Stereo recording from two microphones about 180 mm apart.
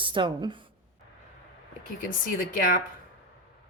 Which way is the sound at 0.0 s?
25° right (ahead or behind).